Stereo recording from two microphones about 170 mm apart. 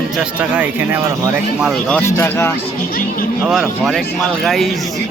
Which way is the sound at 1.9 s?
15° left (ahead or behind).